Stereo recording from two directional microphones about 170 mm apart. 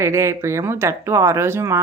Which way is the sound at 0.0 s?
15° right (ahead or behind).